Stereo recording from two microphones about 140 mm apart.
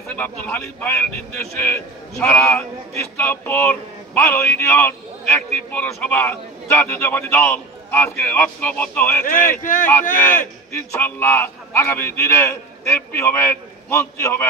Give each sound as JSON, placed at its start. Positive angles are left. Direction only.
{"t": 0.1, "sound": "speech", "side_deg": 10}
{"t": 2.1, "sound": "speech", "side_deg": 5}
{"t": 9.2, "sound": "speech", "side_deg": 75}
{"t": 10.1, "sound": "a man's voice", "side_deg": 15}